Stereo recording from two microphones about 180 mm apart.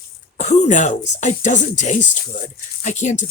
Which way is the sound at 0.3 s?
40° left (ahead or behind).